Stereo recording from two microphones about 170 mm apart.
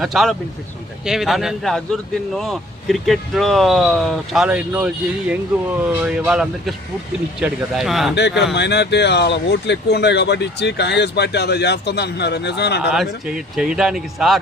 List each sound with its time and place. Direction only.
0.0 s speech: centre (ahead or behind)
6.1 s speech: 5° right (ahead or behind)
8.1 s speech: 90° left
12.8 s speech: 5° right (ahead or behind)